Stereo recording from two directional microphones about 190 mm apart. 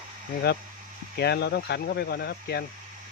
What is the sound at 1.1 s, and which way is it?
Speech, 60° left (ahead or behind).